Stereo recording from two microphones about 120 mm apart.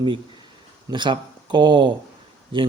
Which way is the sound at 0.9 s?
40° right (ahead or behind).